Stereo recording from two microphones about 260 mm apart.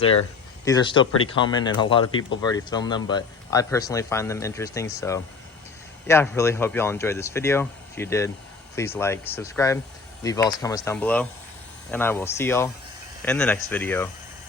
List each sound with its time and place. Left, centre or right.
0.6 s speech: centre